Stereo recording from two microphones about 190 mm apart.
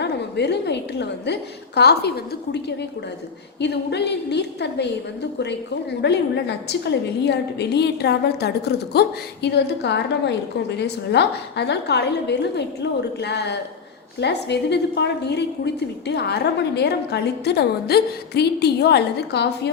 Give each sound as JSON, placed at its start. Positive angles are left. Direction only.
{"t": 0.0, "sound": "a woman's voice", "side_deg": 60}
{"t": 3.6, "sound": "a woman's voice", "side_deg": 65}